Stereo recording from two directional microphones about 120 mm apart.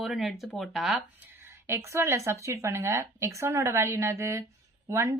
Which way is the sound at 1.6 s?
20° right (ahead or behind).